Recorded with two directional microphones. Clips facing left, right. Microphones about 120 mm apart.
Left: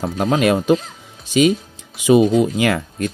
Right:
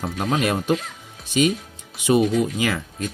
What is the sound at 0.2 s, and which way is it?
Speech, 90° left.